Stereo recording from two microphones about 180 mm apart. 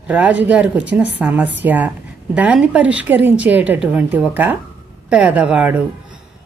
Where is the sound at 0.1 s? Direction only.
10° right (ahead or behind).